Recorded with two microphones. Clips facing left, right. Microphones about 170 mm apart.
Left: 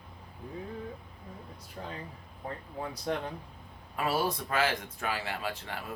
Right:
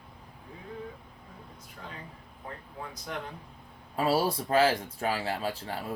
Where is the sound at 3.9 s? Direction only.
35° right (ahead or behind).